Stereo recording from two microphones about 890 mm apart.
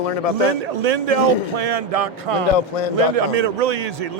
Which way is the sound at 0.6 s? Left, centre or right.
Right.